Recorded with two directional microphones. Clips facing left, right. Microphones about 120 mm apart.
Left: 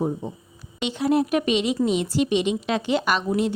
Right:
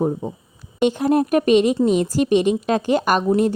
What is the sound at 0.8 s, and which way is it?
Speech, 45° right (ahead or behind).